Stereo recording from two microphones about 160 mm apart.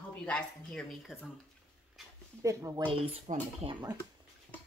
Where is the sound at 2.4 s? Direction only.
20° right (ahead or behind).